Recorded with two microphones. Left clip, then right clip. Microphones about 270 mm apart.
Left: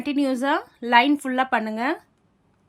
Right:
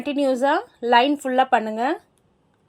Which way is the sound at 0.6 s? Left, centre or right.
Left.